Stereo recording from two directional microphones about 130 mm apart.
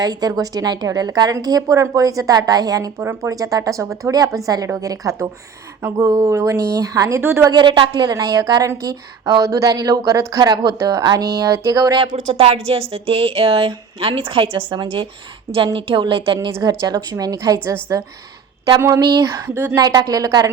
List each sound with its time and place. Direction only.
0.0 s a woman's voice: 30° right (ahead or behind)
7.5 s a woman's voice: 35° right (ahead or behind)
8.2 s a woman's voice: 25° right (ahead or behind)
12.3 s a woman's voice: 45° right (ahead or behind)
16.5 s a woman's voice: 20° right (ahead or behind)